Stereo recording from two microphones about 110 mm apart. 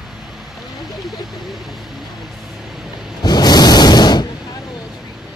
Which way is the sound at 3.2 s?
40° left (ahead or behind).